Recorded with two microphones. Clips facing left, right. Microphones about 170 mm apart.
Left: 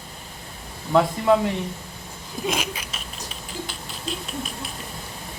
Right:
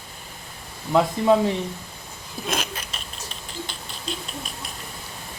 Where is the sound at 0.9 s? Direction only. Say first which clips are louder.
Even; 20° right (ahead or behind).